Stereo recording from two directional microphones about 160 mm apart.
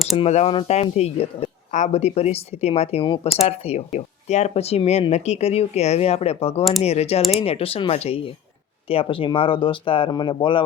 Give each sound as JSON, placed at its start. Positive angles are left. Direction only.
{"t": 0.2, "sound": "speech", "side_deg": 40}